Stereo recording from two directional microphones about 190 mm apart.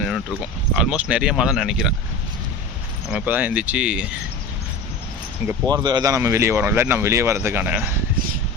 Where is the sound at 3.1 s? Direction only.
5° right (ahead or behind).